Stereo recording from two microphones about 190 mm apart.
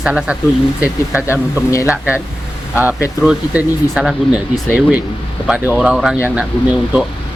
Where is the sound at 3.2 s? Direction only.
5° right (ahead or behind).